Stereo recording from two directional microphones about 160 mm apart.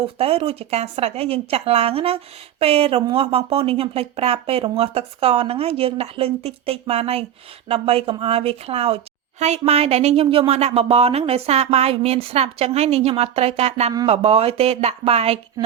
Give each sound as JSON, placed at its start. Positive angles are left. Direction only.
{"t": 0.0, "sound": "speech", "side_deg": -40}